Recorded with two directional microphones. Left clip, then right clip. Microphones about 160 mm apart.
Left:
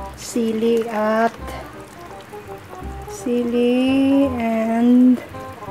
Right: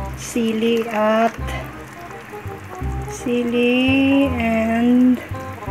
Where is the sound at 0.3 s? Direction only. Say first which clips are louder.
Even; 15° left (ahead or behind).